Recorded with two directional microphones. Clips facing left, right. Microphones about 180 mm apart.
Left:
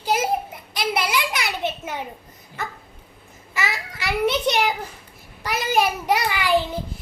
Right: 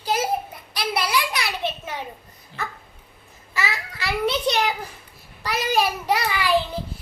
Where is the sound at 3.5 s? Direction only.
15° left (ahead or behind).